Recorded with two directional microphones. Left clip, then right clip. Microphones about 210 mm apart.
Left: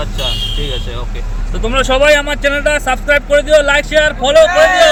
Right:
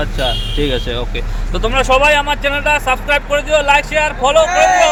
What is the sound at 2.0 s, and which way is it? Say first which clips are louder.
Speech: left 2 dB; 10° right (ahead or behind).